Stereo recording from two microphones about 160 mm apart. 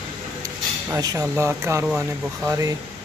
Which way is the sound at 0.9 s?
20° right (ahead or behind).